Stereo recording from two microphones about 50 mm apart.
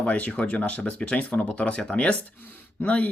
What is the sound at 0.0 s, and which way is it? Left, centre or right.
Speech, left.